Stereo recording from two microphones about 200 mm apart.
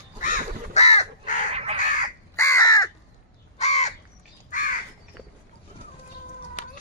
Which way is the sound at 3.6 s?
35° left (ahead or behind).